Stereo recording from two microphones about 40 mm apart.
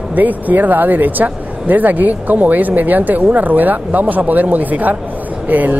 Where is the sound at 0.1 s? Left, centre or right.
Right.